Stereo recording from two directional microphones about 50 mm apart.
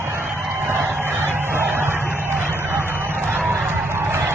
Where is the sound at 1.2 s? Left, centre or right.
Right.